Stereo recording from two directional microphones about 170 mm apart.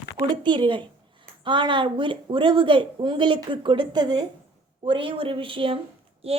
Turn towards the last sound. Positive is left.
turn(degrees=-35)  # may be behind; listen again after turning